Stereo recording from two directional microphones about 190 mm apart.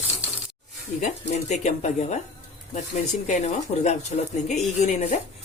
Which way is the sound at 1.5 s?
35° left (ahead or behind).